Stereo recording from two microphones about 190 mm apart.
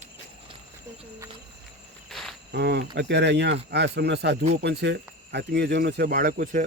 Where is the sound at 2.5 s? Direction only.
60° right (ahead or behind).